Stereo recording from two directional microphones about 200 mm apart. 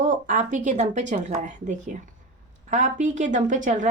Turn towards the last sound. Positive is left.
turn(degrees=-40)  # may be behind; listen again after turning